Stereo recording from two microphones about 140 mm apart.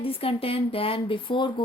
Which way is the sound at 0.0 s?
40° left (ahead or behind).